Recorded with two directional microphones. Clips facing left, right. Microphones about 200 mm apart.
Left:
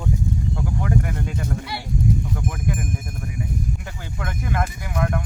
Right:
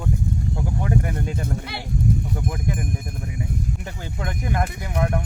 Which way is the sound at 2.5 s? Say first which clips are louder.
Even; 20° right (ahead or behind).